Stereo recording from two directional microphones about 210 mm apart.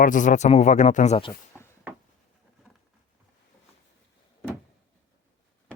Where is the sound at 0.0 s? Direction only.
40° left (ahead or behind).